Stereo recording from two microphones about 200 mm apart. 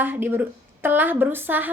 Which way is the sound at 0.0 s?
10° right (ahead or behind).